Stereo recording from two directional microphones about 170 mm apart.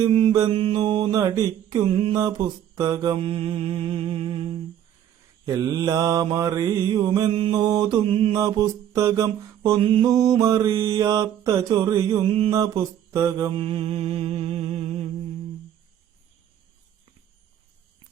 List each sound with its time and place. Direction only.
0.1 s mantra: 30° right (ahead or behind)
5.7 s mantra: 20° right (ahead or behind)
13.5 s mantra: 30° right (ahead or behind)